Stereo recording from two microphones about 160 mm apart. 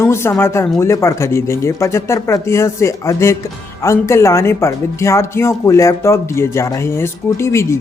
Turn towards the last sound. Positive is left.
turn(degrees=15)  # may be behind; listen again after turning